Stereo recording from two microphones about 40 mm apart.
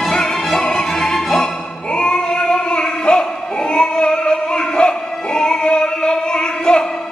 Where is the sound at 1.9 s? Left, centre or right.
Left.